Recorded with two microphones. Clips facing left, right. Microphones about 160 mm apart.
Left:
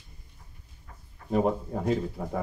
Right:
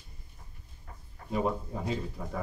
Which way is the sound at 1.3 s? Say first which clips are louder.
Left 5 dB; 55° left (ahead or behind).